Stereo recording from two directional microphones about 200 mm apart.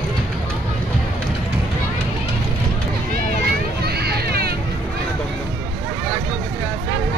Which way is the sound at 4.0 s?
55° right (ahead or behind).